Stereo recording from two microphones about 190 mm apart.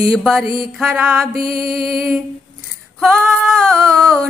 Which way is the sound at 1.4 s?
50° right (ahead or behind).